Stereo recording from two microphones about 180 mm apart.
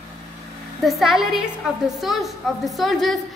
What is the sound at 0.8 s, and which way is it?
A woman's voice, centre (ahead or behind).